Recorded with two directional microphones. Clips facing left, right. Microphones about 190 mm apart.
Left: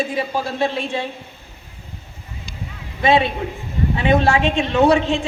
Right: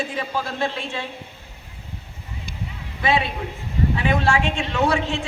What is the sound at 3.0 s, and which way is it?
A man's voice, 25° left (ahead or behind).